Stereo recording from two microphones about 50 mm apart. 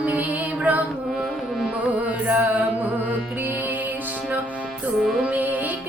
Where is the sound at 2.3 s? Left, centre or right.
Right.